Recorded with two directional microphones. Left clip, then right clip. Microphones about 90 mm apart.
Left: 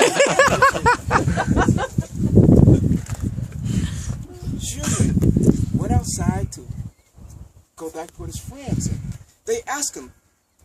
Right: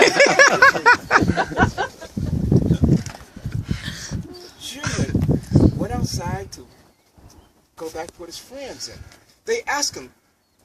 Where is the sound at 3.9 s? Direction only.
15° left (ahead or behind).